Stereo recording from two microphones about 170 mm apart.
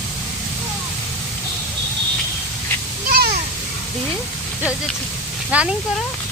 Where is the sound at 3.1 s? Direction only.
65° right (ahead or behind).